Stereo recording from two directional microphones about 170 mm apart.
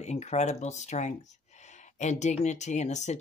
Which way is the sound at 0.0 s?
40° left (ahead or behind).